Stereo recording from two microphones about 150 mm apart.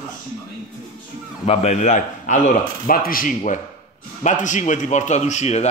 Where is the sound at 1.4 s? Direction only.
50° left (ahead or behind).